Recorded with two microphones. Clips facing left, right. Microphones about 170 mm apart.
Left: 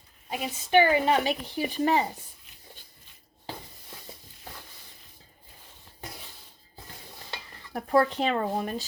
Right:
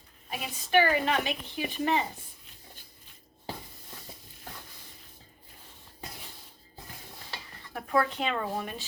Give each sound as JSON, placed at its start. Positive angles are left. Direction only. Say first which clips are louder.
{"t": 0.3, "sound": "a woman's voice", "louder": "left 4 dB", "side_deg": 20}
{"t": 1.0, "sound": "speech", "louder": "left 5 dB", "side_deg": 35}
{"t": 7.7, "sound": "speech", "louder": "left 4 dB", "side_deg": 35}